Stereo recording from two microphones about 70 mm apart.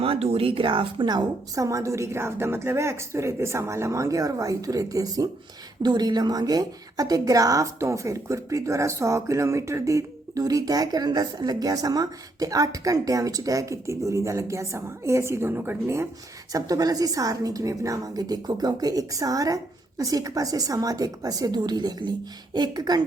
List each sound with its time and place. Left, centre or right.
1.0 s a woman's voice: right
1.6 s a woman's voice: right
5.8 s a woman's voice: right
16.5 s a woman's voice: right